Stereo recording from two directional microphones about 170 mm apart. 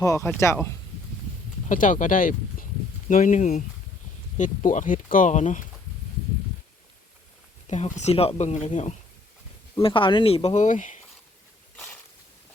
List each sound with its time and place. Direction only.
0.0 s speech: 15° left (ahead or behind)
1.7 s speech: 50° left (ahead or behind)
7.7 s speech: 45° left (ahead or behind)
9.8 s speech: 30° left (ahead or behind); by 11.0 s 45° left (ahead or behind)